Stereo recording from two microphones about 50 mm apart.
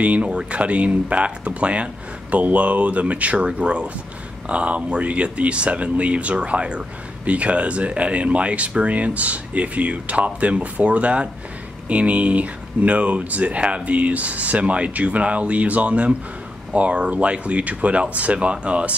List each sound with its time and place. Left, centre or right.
0.0 s speech: right